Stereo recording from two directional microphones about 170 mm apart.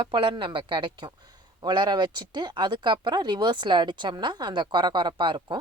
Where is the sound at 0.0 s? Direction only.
30° right (ahead or behind).